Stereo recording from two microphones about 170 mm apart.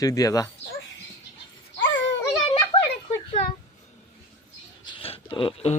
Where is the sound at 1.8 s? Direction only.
90° left.